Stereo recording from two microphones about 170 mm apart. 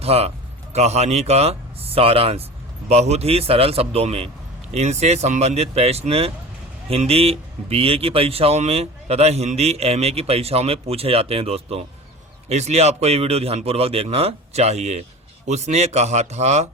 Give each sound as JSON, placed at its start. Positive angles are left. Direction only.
{"t": 0.0, "sound": "speech", "side_deg": -35}